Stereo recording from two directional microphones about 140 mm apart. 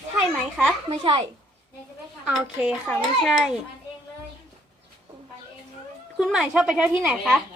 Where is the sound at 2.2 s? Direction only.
5° right (ahead or behind).